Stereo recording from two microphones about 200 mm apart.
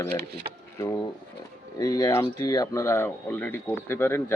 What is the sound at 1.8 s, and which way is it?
Speech, 20° left (ahead or behind).